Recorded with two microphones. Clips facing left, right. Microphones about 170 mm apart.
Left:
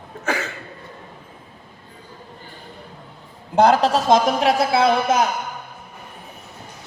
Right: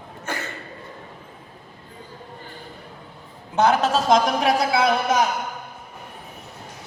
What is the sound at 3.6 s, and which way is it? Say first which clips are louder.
A woman's voice: left 3 dB; 35° left (ahead or behind).